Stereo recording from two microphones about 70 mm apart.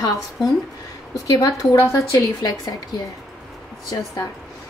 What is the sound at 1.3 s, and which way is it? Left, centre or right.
Speech, left.